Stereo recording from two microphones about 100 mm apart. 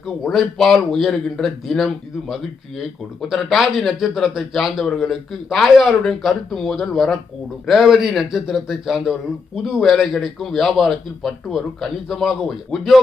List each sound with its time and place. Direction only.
0.0 s speech: centre (ahead or behind)